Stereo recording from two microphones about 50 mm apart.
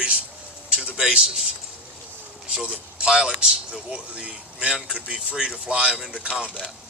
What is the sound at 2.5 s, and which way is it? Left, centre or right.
A man's voice, centre.